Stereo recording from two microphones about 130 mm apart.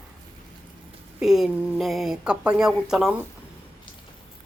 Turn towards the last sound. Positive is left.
turn(degrees=-5)  # may be behind; listen again after turning